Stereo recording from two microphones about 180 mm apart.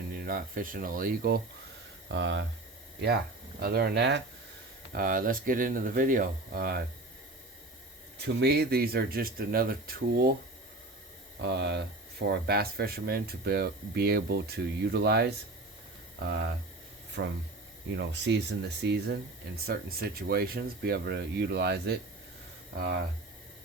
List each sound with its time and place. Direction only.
0.3 s speech: 55° right (ahead or behind)
2.0 s speech: 85° right
3.0 s speech: 65° right (ahead or behind)
4.9 s speech: 50° right (ahead or behind)
8.2 s speech: 65° right (ahead or behind)
11.3 s speech: 70° right (ahead or behind)
17.2 s speech: 90° right
17.8 s speech: 75° right (ahead or behind)